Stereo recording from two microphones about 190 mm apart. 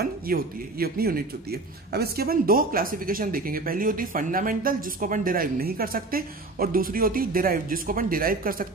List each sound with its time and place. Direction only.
0.0 s speech: 55° right (ahead or behind)